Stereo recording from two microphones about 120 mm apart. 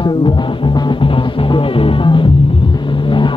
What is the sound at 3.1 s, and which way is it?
Vehicle, 40° left (ahead or behind).